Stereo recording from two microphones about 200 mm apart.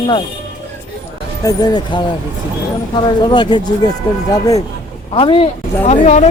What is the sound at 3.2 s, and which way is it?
Speech, 20° left (ahead or behind).